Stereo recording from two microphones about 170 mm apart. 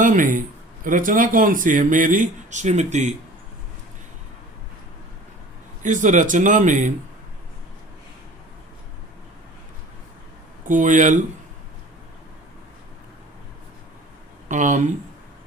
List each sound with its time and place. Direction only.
0.0 s speech: 50° right (ahead or behind)
5.8 s speech: 45° right (ahead or behind)
10.7 s speech: 50° right (ahead or behind)
14.4 s speech: 50° right (ahead or behind)